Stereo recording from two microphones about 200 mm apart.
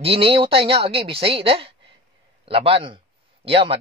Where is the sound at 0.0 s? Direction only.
30° right (ahead or behind).